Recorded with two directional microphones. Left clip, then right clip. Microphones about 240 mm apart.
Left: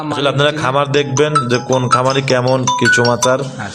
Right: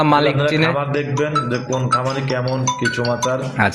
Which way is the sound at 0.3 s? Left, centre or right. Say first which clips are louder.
Left 4 dB; left.